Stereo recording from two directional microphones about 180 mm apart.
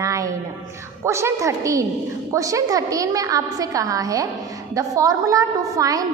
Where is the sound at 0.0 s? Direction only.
15° right (ahead or behind).